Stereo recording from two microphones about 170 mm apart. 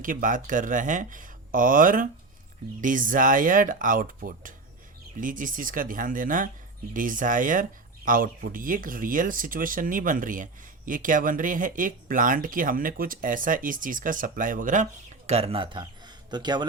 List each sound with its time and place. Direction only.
0.0 s speech: 50° right (ahead or behind)
15.3 s speech: 35° right (ahead or behind)